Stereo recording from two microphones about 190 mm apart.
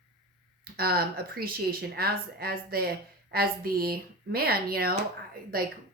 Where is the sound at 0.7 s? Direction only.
55° right (ahead or behind).